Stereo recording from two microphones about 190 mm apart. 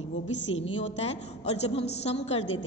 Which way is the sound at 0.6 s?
35° left (ahead or behind).